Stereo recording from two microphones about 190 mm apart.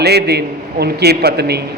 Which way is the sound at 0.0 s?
60° right (ahead or behind).